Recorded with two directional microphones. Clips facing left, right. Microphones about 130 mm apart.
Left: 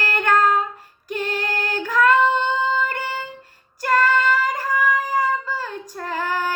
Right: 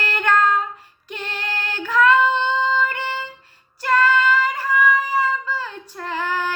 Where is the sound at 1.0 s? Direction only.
45° left (ahead or behind).